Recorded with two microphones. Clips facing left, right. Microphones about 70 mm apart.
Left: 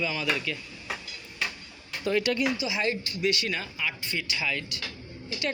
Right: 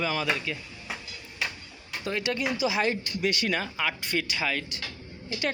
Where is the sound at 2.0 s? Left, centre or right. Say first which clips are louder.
Left 4 dB; centre.